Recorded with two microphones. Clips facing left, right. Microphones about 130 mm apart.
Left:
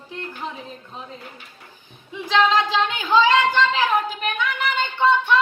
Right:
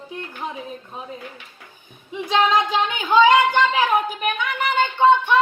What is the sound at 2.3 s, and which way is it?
Speech, 15° right (ahead or behind).